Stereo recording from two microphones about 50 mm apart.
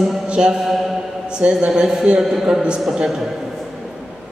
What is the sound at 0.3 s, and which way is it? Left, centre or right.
Speech, centre.